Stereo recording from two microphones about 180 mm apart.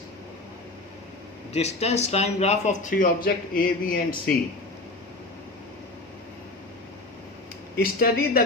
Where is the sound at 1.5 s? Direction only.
35° left (ahead or behind).